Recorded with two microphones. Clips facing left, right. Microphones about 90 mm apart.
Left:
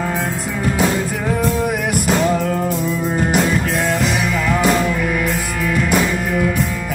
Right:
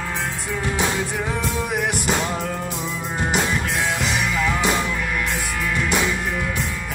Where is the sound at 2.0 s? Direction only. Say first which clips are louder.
Left 7 dB; centre (ahead or behind).